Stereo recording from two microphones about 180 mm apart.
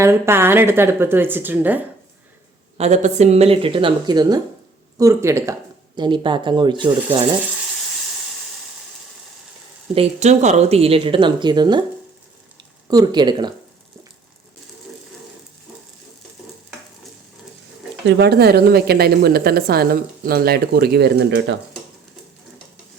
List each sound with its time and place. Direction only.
0.0 s a woman's voice: 15° right (ahead or behind)
2.7 s a woman's voice: 40° right (ahead or behind); by 5.5 s 15° right (ahead or behind)
6.0 s speech: 25° right (ahead or behind)
9.9 s speech: 35° right (ahead or behind)
12.9 s speech: 25° right (ahead or behind)
18.0 s a woman's voice: 65° right (ahead or behind)